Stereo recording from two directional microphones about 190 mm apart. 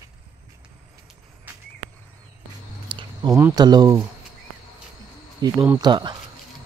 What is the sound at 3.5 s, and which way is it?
Speech, 20° right (ahead or behind).